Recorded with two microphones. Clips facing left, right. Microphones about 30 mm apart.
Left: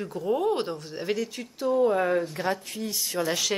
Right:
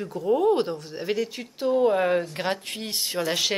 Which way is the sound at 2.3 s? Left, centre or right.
Right.